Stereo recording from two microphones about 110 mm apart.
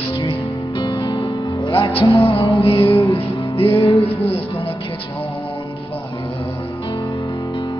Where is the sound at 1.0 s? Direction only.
35° left (ahead or behind).